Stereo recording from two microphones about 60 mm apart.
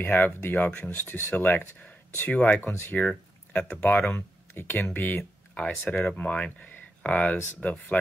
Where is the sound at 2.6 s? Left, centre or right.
Left.